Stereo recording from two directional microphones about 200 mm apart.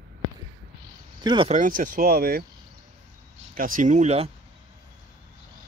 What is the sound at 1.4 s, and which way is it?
Speech, 40° right (ahead or behind).